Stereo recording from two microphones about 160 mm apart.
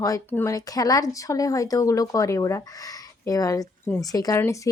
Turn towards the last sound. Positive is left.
turn(degrees=20)  # may be behind; listen again after turning